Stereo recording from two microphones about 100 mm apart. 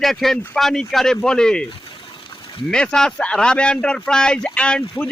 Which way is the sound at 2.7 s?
10° left (ahead or behind).